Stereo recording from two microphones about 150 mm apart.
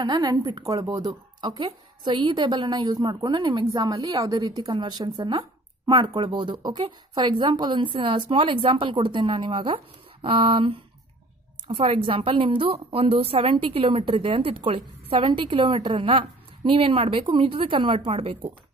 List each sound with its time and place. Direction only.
0.0 s a woman's voice: 25° right (ahead or behind)